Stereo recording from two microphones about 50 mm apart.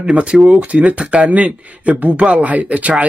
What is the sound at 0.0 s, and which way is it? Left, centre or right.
Speech, right.